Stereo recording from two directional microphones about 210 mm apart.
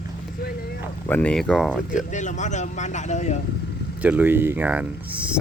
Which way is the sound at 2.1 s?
35° left (ahead or behind).